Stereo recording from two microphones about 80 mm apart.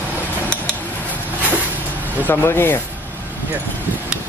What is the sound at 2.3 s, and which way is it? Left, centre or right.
Speech, left.